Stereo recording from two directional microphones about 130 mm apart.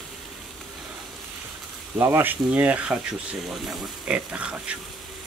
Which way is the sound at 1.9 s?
20° right (ahead or behind).